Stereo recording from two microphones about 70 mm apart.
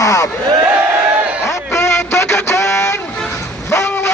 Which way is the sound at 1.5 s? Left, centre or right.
Left.